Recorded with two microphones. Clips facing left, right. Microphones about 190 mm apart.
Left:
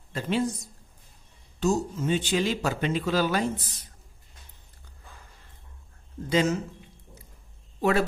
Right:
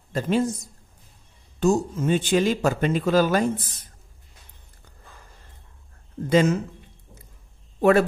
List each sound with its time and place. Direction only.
0.1 s speech: 45° right (ahead or behind)
1.6 s speech: 50° right (ahead or behind)
6.2 s speech: 50° right (ahead or behind)